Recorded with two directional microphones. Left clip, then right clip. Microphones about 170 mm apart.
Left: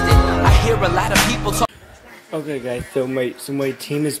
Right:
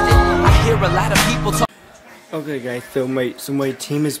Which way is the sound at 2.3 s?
10° right (ahead or behind).